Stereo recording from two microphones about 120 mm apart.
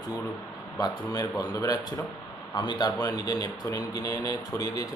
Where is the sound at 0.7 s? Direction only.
30° left (ahead or behind).